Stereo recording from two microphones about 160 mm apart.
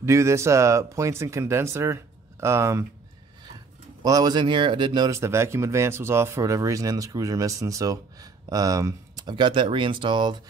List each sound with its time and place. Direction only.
0.0 s speech: 20° right (ahead or behind)
4.0 s speech: 25° right (ahead or behind)